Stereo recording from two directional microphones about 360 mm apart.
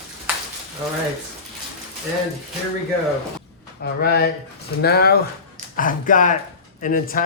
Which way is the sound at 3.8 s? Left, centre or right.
Left.